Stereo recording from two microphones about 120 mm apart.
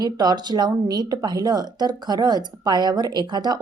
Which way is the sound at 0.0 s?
35° right (ahead or behind).